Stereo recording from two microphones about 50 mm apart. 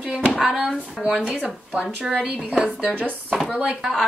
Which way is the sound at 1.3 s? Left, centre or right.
Right.